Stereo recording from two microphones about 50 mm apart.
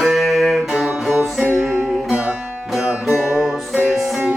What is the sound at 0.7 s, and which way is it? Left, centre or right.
Music, centre.